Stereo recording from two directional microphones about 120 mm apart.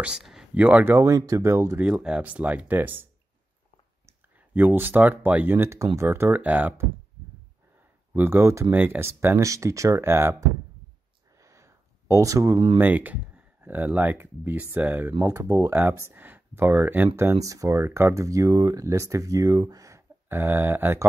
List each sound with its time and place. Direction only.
0.0 s a sound: 5° right (ahead or behind)
0.6 s speech: 15° right (ahead or behind)
0.9 s speech: 25° right (ahead or behind)
1.9 s speech: 10° right (ahead or behind)
4.6 s speech: 15° right (ahead or behind)
8.1 s speech: 20° right (ahead or behind)
11.3 s a sound: 25° right (ahead or behind)
12.7 s speech: 15° right (ahead or behind)
15.3 s speech: 30° right (ahead or behind)